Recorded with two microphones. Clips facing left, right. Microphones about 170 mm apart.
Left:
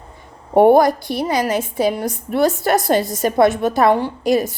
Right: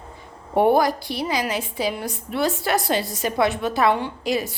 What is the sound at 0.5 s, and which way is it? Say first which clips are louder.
A woman's voice: left 6 dB; 50° left (ahead or behind).